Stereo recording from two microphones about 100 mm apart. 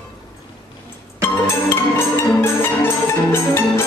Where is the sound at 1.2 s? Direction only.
25° left (ahead or behind).